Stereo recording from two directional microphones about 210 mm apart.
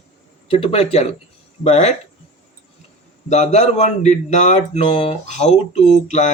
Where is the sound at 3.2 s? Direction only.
30° left (ahead or behind).